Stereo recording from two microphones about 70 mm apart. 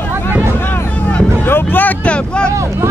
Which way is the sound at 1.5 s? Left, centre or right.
Left.